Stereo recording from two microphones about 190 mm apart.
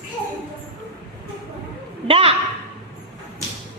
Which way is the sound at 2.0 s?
30° right (ahead or behind).